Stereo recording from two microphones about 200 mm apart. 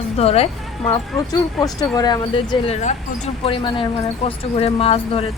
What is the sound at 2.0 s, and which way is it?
Speech, 20° left (ahead or behind).